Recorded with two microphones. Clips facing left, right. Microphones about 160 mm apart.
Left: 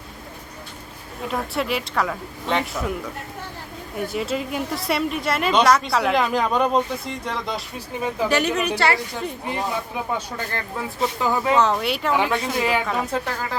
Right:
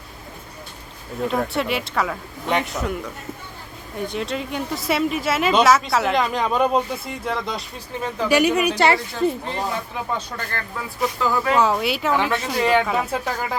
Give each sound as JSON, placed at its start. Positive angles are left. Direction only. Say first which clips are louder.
{"t": 1.3, "sound": "a woman's voice", "louder": "right 1 dB", "side_deg": 0}
{"t": 9.5, "sound": "speech", "louder": "even", "side_deg": 10}
{"t": 11.5, "sound": "a woman's voice", "louder": "even", "side_deg": -5}